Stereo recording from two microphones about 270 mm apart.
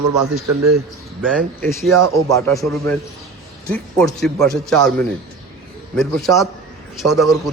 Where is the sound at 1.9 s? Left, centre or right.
Right.